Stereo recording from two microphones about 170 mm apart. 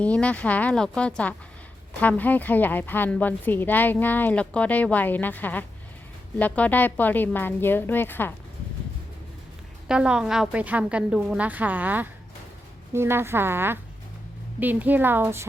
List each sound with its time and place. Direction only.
0.0 s a woman's voice: 5° left (ahead or behind)
9.9 s a woman's voice: 5° right (ahead or behind)